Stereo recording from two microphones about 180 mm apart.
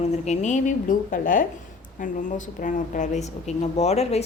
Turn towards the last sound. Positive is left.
turn(degrees=35)  # may be behind; listen again after turning